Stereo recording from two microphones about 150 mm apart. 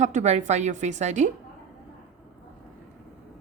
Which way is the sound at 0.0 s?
50° right (ahead or behind).